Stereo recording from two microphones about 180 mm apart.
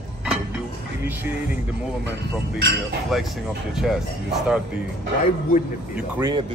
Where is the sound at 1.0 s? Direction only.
10° right (ahead or behind).